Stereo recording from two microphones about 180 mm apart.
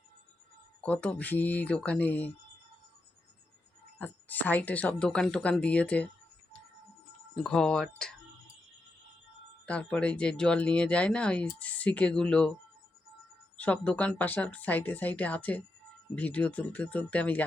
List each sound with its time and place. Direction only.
0.8 s speech: 5° left (ahead or behind)
3.9 s speech: 10° left (ahead or behind)
7.3 s speech: 5° left (ahead or behind)
9.6 s speech: 5° left (ahead or behind)
13.6 s speech: 10° left (ahead or behind)